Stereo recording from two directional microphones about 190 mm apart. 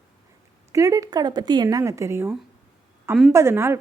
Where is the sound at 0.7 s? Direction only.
15° right (ahead or behind).